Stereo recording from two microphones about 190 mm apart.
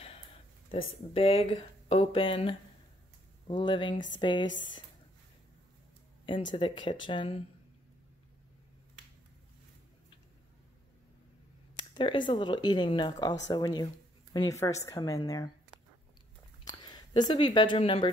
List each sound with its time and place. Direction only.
0.7 s speech: 30° left (ahead or behind)
6.5 s speech: 25° left (ahead or behind)
11.9 s speech: 25° left (ahead or behind)
16.6 s speech: 20° left (ahead or behind)